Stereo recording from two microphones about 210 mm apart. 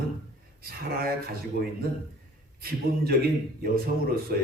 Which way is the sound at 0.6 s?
45° right (ahead or behind).